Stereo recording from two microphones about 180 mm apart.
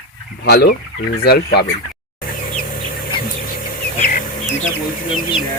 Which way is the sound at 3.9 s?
45° left (ahead or behind).